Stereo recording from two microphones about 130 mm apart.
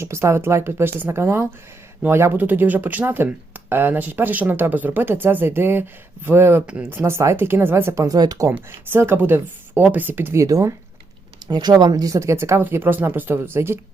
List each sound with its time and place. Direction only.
0.0 s speech: 20° right (ahead or behind)
8.5 s speech: 15° right (ahead or behind)